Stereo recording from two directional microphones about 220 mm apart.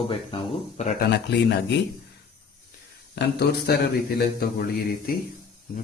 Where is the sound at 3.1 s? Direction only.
50° left (ahead or behind).